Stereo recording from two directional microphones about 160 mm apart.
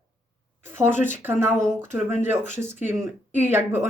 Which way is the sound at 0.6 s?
15° right (ahead or behind).